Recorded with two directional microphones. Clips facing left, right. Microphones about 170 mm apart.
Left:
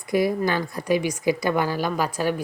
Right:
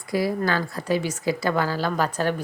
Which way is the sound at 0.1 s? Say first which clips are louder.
Left 2 dB; 20° left (ahead or behind).